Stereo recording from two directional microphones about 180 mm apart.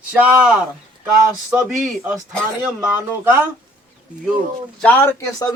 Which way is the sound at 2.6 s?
10° right (ahead or behind).